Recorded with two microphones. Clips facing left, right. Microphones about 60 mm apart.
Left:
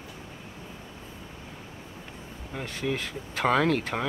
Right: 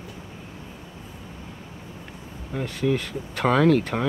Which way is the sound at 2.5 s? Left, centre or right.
Centre.